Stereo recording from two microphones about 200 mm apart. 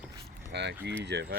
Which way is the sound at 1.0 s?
55° right (ahead or behind).